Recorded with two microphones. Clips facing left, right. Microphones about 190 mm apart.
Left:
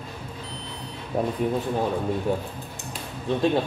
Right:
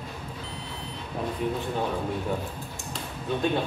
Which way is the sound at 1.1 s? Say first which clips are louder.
Left 7 dB; 55° left (ahead or behind).